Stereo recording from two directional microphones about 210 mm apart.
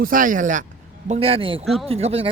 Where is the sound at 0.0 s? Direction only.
40° right (ahead or behind).